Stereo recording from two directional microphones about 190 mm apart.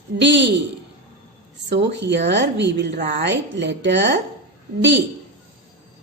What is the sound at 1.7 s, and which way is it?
A woman's voice, 65° right (ahead or behind).